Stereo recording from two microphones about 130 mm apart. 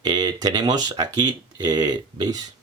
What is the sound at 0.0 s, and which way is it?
Speech, 35° right (ahead or behind).